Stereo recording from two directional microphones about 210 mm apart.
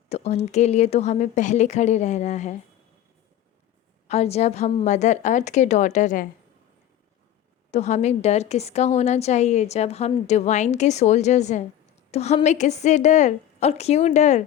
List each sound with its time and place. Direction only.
0.1 s a woman's voice: 30° left (ahead or behind)
4.1 s a woman's voice: 30° left (ahead or behind)
7.7 s a woman's voice: 35° left (ahead or behind)